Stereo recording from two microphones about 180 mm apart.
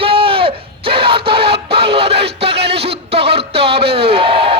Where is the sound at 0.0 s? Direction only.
30° right (ahead or behind).